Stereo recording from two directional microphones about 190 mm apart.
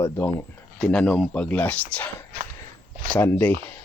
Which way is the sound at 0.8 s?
5° left (ahead or behind).